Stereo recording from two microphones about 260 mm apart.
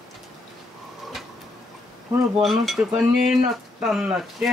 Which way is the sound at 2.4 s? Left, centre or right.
Centre.